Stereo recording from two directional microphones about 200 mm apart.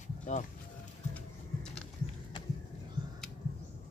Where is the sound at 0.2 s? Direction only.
40° left (ahead or behind).